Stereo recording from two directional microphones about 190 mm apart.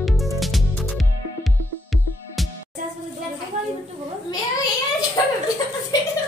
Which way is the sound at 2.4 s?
Centre (ahead or behind).